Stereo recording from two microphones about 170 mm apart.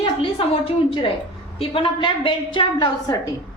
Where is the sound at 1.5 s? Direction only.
30° left (ahead or behind).